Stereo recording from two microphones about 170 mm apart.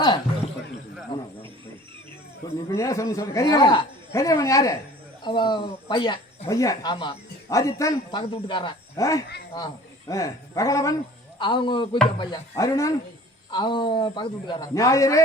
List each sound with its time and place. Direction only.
1.1 s speech: 25° left (ahead or behind)
2.6 s speech: 15° left (ahead or behind)
6.9 s speech: 30° left (ahead or behind)
7.5 s speech: 20° left (ahead or behind)
8.2 s a man's voice: 30° left (ahead or behind)